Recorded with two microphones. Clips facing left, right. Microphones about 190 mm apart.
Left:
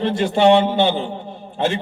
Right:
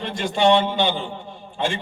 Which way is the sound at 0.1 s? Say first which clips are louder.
Left 3 dB; 60° left (ahead or behind).